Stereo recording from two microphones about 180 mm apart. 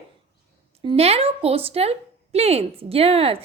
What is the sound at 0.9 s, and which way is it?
A woman's voice, 35° right (ahead or behind).